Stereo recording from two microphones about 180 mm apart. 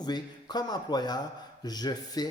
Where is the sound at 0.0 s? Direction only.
25° left (ahead or behind).